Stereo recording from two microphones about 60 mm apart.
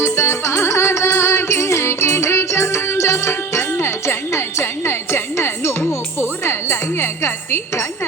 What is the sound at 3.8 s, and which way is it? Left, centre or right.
Music, left.